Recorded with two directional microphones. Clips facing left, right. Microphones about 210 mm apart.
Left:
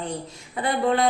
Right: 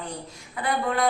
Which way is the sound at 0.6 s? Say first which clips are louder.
Left 3 dB; 25° left (ahead or behind).